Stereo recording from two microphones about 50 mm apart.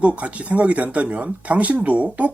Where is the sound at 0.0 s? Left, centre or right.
Right.